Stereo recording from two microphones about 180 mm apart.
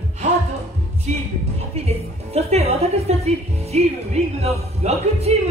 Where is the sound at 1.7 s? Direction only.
35° right (ahead or behind).